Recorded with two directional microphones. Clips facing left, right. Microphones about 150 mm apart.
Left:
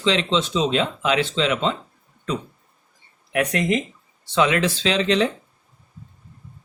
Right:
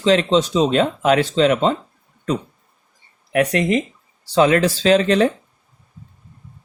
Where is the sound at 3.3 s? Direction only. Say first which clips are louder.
Right 4 dB; 35° right (ahead or behind).